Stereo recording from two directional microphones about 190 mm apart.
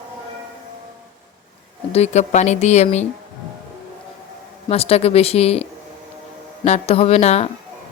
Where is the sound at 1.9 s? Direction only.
35° left (ahead or behind).